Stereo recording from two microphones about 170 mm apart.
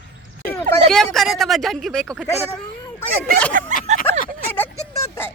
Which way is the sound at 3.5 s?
50° right (ahead or behind).